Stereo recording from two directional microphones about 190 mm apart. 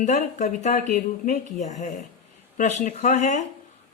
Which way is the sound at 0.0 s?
40° left (ahead or behind).